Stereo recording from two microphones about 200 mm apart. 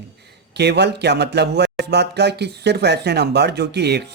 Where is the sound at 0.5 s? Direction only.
55° right (ahead or behind).